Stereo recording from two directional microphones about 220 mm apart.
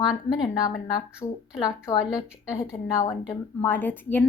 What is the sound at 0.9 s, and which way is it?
A woman's voice, 15° left (ahead or behind).